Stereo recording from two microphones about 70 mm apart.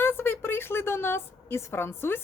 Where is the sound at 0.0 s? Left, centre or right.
Left.